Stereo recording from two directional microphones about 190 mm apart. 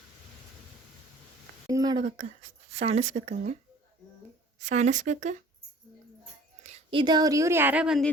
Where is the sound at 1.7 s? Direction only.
20° right (ahead or behind).